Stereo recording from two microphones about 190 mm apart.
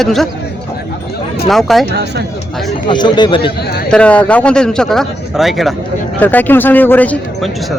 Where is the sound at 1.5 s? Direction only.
Centre (ahead or behind).